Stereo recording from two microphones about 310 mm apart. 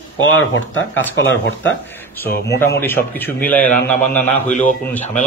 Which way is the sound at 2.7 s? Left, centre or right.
Centre.